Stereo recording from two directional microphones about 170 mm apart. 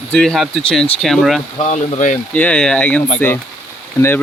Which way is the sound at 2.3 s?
5° left (ahead or behind).